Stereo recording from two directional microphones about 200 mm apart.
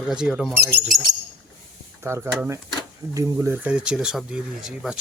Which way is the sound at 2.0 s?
15° right (ahead or behind).